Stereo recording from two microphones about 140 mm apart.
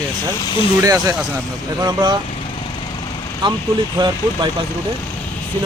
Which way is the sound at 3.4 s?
35° right (ahead or behind).